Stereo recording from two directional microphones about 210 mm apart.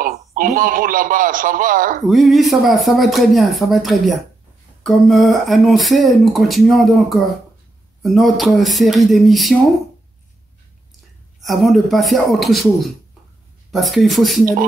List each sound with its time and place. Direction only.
0.0 s a man's voice: 40° right (ahead or behind)
2.0 s speech: centre (ahead or behind)
11.4 s speech: centre (ahead or behind)